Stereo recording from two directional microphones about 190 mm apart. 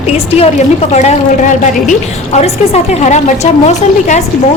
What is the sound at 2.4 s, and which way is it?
A woman's voice, 35° left (ahead or behind).